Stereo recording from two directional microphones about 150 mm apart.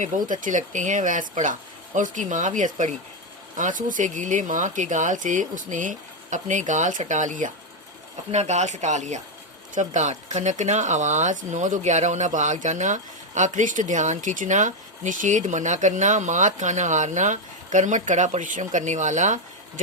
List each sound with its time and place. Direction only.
0.3 s speech: 60° right (ahead or behind)